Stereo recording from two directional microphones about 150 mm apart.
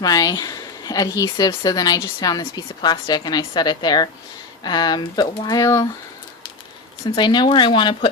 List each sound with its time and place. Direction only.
0.0 s a woman's voice: 25° left (ahead or behind)
7.2 s speech: 30° left (ahead or behind)